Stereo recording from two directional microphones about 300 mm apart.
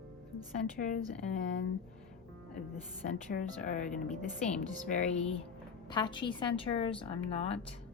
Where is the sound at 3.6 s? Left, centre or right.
Left.